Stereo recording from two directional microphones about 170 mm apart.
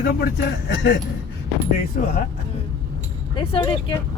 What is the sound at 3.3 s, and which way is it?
Speech, 30° left (ahead or behind).